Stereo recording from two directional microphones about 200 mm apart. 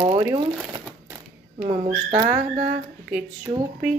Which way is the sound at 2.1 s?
20° right (ahead or behind).